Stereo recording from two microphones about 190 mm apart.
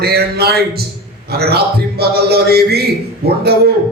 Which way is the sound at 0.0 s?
55° right (ahead or behind).